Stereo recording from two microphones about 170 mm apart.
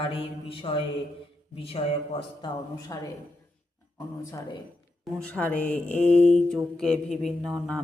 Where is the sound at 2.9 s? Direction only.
20° left (ahead or behind).